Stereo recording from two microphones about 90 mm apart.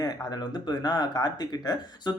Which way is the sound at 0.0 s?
50° left (ahead or behind).